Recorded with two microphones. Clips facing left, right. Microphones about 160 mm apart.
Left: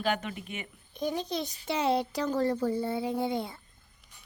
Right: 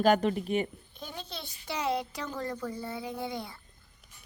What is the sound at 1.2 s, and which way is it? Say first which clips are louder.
A woman's voice: left 9 dB; 15° left (ahead or behind).